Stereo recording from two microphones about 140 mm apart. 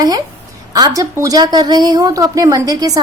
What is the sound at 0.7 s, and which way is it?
A woman's voice, 30° right (ahead or behind).